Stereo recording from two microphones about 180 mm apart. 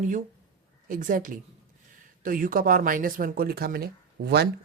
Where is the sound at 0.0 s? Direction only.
45° right (ahead or behind).